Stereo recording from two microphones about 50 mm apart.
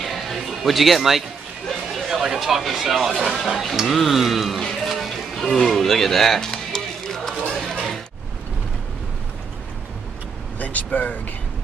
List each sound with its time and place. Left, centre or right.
0.0 s a sound: centre
2.0 s speech: centre
4.8 s music: centre
10.6 s speech: left